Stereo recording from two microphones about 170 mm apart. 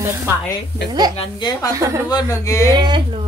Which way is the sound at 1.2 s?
25° left (ahead or behind).